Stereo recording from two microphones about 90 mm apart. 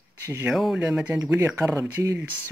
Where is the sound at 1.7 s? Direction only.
30° right (ahead or behind).